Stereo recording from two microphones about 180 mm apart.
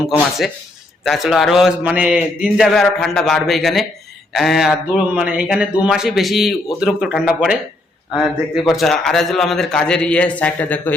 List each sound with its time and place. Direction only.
1.0 s a man's voice: centre (ahead or behind)